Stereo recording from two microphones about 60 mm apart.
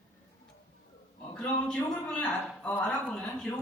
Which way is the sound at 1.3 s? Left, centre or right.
Centre.